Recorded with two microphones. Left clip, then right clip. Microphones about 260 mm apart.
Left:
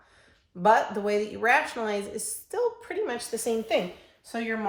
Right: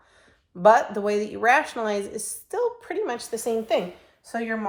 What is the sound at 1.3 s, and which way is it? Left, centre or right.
Speech, right.